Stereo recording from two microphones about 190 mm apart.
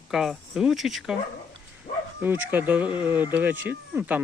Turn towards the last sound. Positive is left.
turn(degrees=-10)  # may be behind; listen again after turning